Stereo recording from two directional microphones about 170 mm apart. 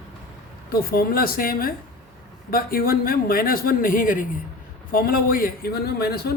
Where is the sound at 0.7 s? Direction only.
60° left (ahead or behind).